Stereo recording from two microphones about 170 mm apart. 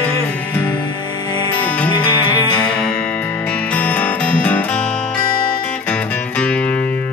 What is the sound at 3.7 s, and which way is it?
Music, 10° left (ahead or behind).